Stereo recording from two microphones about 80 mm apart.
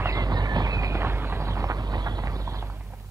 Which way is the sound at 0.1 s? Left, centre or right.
Right.